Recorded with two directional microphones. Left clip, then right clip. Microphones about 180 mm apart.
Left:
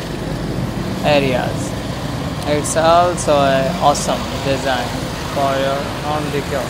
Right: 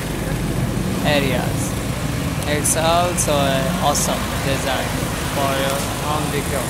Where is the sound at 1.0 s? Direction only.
20° left (ahead or behind).